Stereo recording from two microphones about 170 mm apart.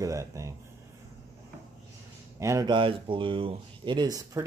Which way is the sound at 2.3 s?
20° right (ahead or behind).